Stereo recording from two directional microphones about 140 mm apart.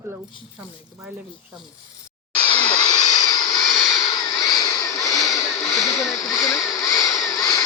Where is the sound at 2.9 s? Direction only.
30° left (ahead or behind).